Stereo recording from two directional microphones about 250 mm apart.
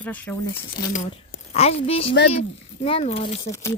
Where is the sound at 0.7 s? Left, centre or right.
Left.